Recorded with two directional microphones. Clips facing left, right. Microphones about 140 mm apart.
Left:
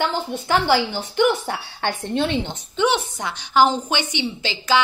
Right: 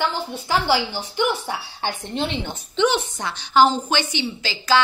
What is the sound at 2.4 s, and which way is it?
Speech, 25° left (ahead or behind).